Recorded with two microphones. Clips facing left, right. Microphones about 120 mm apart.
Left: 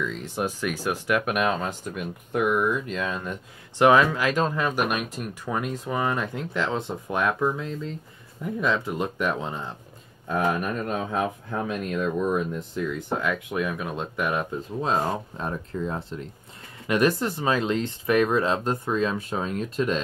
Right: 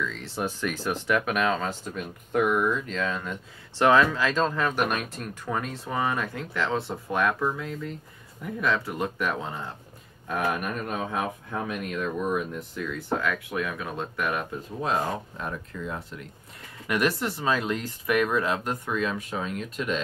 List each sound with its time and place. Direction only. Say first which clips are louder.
0.0 s speech: left 2 dB; 15° left (ahead or behind)
11.6 s speech: left 4 dB; 30° left (ahead or behind)